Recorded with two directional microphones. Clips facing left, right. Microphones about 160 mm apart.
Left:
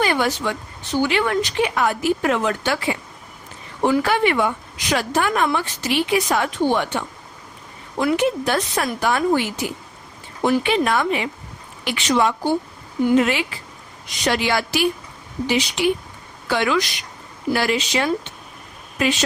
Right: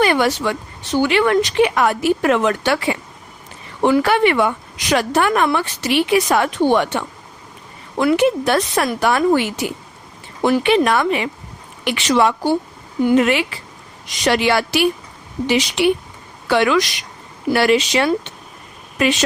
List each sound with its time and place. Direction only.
0.0 s a woman's voice: 70° right (ahead or behind)
13.1 s a woman's voice: 60° right (ahead or behind)